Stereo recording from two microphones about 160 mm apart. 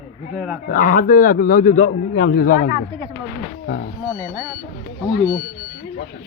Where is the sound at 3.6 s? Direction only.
90° left.